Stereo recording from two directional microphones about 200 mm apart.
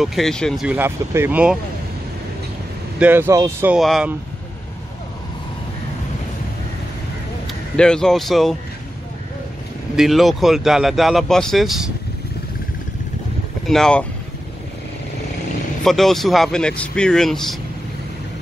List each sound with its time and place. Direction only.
0.0 s speech: centre (ahead or behind)
3.0 s speech: 10° right (ahead or behind)
3.7 s speech: centre (ahead or behind)
7.7 s speech: 5° left (ahead or behind)
9.9 s speech: centre (ahead or behind)
13.7 s speech: 5° left (ahead or behind)
15.8 s speech: centre (ahead or behind)